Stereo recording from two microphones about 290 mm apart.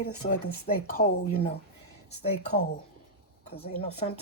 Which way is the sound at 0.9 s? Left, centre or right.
Left.